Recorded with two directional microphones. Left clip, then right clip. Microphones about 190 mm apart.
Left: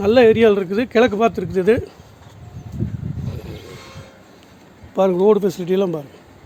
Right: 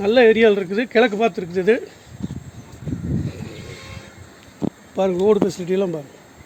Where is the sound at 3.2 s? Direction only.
15° left (ahead or behind).